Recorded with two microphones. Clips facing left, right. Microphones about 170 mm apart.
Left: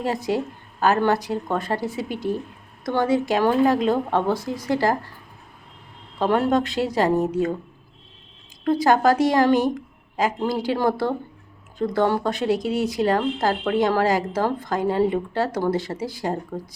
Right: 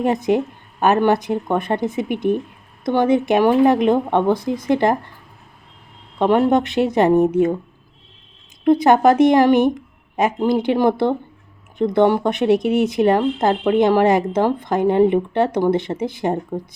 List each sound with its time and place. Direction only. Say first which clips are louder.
0.0 s speech: right 6 dB; 20° right (ahead or behind)
6.1 s speech: right 5 dB; 15° right (ahead or behind)
8.6 s speech: right 5 dB; 20° right (ahead or behind)